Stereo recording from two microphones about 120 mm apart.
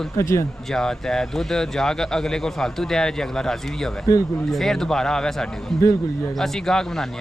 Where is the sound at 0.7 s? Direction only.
5° left (ahead or behind).